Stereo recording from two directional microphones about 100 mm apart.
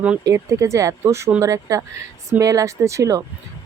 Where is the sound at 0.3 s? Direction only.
30° right (ahead or behind).